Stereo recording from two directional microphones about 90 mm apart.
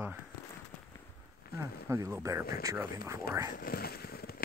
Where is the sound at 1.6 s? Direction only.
35° right (ahead or behind).